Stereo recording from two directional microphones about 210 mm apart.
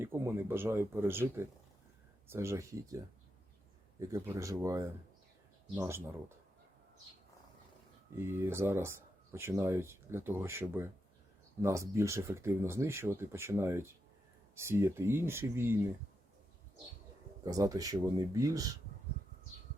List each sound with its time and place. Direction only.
0.0 s speech: 10° right (ahead or behind)
4.1 s speech: 15° right (ahead or behind)
8.1 s speech: 10° right (ahead or behind)
17.4 s speech: 15° right (ahead or behind)